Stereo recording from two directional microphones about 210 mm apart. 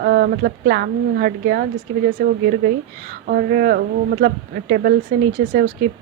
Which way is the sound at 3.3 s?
45° right (ahead or behind).